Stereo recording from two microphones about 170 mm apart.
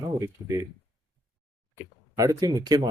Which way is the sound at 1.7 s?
20° right (ahead or behind).